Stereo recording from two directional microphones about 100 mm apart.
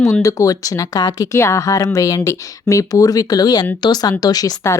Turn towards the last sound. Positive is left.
turn(degrees=40)  # may be behind; listen again after turning